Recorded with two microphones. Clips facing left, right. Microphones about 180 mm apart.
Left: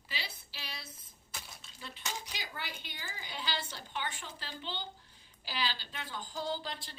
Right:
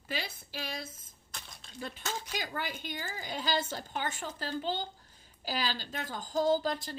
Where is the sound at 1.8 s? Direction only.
45° right (ahead or behind).